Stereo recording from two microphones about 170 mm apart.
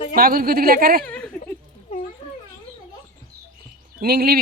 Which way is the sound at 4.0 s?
65° right (ahead or behind).